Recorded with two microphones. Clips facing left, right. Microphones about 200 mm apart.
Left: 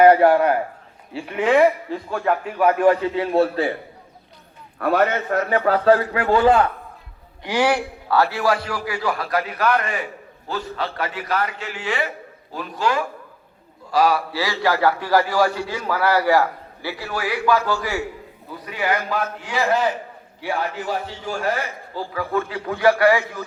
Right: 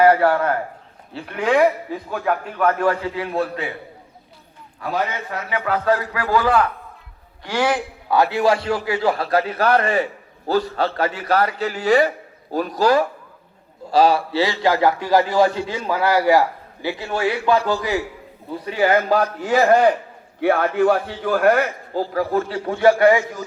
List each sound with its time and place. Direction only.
0.2 s a man's voice: 20° left (ahead or behind)
1.1 s a man's voice: 5° left (ahead or behind)
2.6 s a man's voice: 15° left (ahead or behind); by 3.8 s 35° left (ahead or behind)
4.8 s a man's voice: 60° left (ahead or behind); by 6.7 s 25° left (ahead or behind)
7.4 s a man's voice: 10° left (ahead or behind)
8.0 s a man's voice: 15° right (ahead or behind); by 13.1 s 35° right (ahead or behind)
13.9 s a man's voice: 25° right (ahead or behind)
16.0 s a man's voice: 15° right (ahead or behind)
19.0 s a man's voice: 40° right (ahead or behind); by 22.0 s 55° right (ahead or behind)
22.1 s a man's voice: 40° right (ahead or behind); by 23.2 s 25° right (ahead or behind)